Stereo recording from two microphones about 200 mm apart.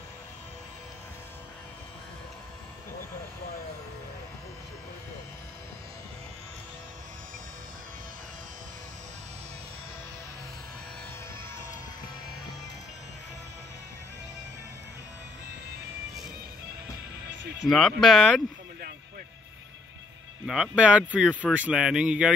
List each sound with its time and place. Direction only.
17.3 s music: 65° right (ahead or behind)
17.6 s speech: centre (ahead or behind)
20.4 s speech: centre (ahead or behind)